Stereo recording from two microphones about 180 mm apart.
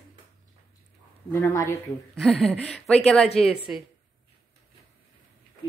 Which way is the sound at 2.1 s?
Centre (ahead or behind).